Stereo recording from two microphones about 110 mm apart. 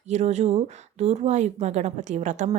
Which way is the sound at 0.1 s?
90° right.